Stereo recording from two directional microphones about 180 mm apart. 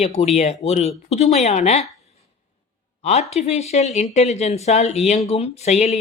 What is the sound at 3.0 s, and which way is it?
Speech, 35° left (ahead or behind).